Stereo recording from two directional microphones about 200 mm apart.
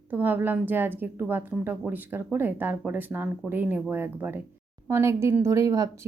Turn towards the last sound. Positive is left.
turn(degrees=-15)  # may be behind; listen again after turning